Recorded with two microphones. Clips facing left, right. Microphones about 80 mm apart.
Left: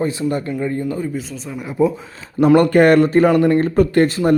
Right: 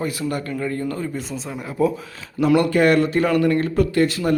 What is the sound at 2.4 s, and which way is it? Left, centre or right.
Speech, left.